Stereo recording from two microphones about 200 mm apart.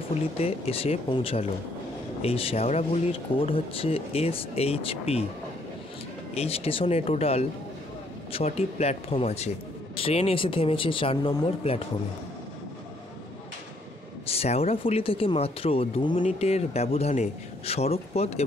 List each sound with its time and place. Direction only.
0.1 s speech: 30° left (ahead or behind)
6.3 s speech: 30° left (ahead or behind)
14.2 s speech: 30° left (ahead or behind)